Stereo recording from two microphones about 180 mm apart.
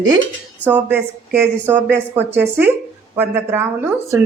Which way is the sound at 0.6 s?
10° right (ahead or behind).